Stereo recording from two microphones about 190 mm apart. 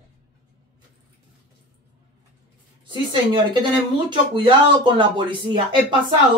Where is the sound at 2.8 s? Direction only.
25° right (ahead or behind).